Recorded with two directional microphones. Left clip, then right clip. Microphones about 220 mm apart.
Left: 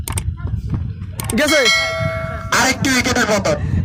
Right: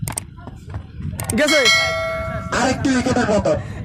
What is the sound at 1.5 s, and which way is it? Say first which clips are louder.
Bell: left 1 dB; centre (ahead or behind).